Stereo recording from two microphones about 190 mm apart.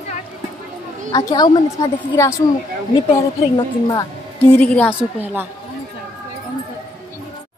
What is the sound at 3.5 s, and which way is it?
Speech, 20° left (ahead or behind).